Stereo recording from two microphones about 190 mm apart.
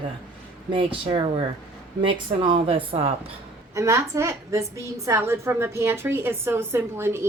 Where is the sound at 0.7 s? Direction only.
25° right (ahead or behind).